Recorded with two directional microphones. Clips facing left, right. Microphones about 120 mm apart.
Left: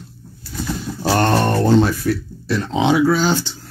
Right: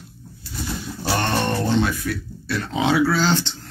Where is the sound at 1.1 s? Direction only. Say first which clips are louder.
Left 6 dB; 40° left (ahead or behind).